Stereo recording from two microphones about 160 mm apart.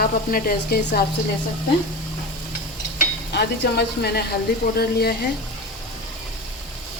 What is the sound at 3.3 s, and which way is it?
Speech, 85° left.